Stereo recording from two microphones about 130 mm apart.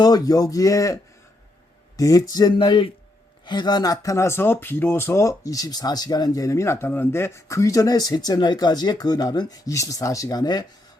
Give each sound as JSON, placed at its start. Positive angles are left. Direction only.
{"t": 0.0, "sound": "speech", "side_deg": 30}
{"t": 2.0, "sound": "speech", "side_deg": 25}